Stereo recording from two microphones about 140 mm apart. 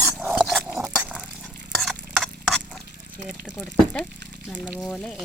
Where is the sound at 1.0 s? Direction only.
10° right (ahead or behind).